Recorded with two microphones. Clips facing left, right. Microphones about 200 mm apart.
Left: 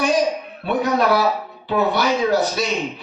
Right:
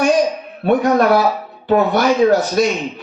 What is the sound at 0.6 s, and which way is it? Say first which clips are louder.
A man's voice: right 6 dB; 50° right (ahead or behind).